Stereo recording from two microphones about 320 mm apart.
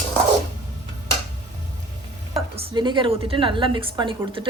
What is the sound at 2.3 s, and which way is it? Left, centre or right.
Speech, centre.